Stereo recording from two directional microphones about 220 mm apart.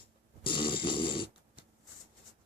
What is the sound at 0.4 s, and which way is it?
Snoring, 20° left (ahead or behind).